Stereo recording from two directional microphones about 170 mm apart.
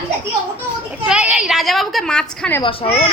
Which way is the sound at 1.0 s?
5° right (ahead or behind).